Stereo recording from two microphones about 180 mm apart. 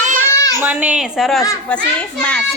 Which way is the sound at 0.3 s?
15° left (ahead or behind).